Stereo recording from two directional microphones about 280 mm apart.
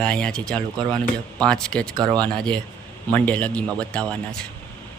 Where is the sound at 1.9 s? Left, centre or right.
Centre.